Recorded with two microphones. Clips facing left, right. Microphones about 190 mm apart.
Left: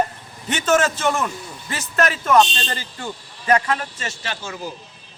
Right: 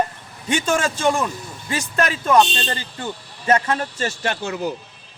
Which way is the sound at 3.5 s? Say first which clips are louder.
Even; 30° right (ahead or behind).